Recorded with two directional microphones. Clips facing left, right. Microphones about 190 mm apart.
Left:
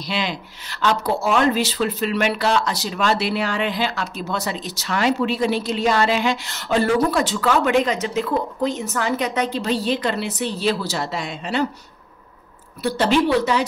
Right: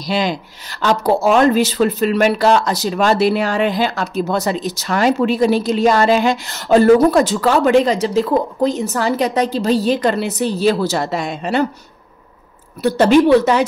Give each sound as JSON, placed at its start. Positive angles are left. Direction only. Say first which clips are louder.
{"t": 0.0, "sound": "a woman's voice", "louder": "right 7 dB", "side_deg": -40}
{"t": 12.8, "sound": "a woman's voice", "louder": "right 7 dB", "side_deg": -45}